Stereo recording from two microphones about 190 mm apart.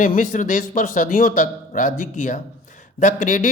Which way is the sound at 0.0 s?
45° left (ahead or behind).